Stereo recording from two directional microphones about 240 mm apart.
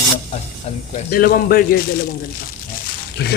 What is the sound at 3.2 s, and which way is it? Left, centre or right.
Speech, left.